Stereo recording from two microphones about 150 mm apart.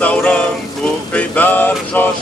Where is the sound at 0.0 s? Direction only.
5° left (ahead or behind).